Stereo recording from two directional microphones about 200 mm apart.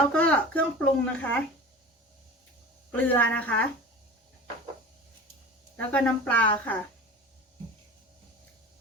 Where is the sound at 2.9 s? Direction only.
10° left (ahead or behind).